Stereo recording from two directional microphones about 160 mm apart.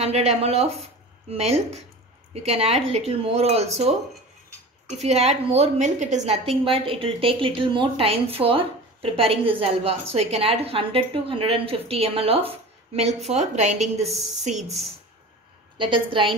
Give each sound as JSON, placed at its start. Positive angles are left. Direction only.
{"t": 0.0, "sound": "a woman's voice", "side_deg": -40}
{"t": 14.0, "sound": "a woman's voice", "side_deg": 0}
{"t": 14.4, "sound": "a woman's voice", "side_deg": -45}
{"t": 15.8, "sound": "a woman's voice", "side_deg": -30}